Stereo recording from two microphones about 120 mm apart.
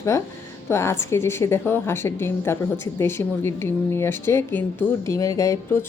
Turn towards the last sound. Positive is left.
turn(degrees=25)  # may be behind; listen again after turning